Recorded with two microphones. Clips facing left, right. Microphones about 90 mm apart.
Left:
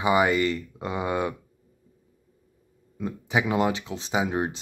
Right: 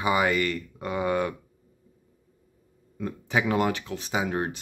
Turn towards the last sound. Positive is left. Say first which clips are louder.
# left 2 dB
turn(degrees=20)  # may be behind; listen again after turning